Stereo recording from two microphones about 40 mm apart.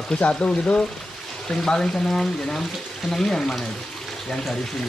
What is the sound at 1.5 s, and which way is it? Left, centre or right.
Speech, centre.